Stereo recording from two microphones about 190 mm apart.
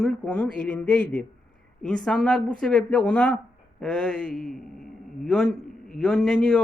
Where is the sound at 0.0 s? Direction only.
5° left (ahead or behind).